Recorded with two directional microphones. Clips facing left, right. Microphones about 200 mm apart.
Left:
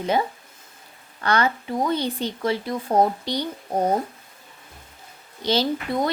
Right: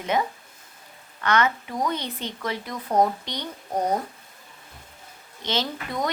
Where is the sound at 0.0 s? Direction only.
30° left (ahead or behind).